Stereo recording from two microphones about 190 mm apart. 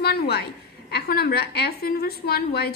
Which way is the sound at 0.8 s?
55° left (ahead or behind).